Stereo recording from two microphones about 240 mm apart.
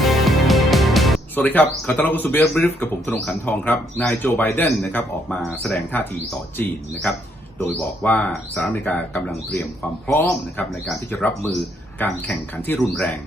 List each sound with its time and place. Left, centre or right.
0.0 s speech: centre
7.6 s speech: centre